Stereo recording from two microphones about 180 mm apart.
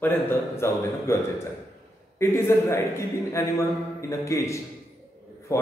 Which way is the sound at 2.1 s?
15° left (ahead or behind).